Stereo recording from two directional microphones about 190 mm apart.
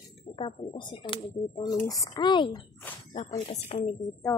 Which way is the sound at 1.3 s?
15° left (ahead or behind).